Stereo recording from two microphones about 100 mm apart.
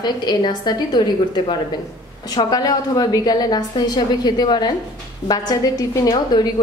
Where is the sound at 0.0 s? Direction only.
45° left (ahead or behind).